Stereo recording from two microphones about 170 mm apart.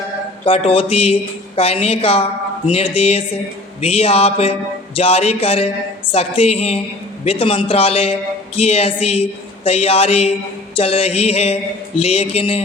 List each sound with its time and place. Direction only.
0.4 s mantra: 35° left (ahead or behind)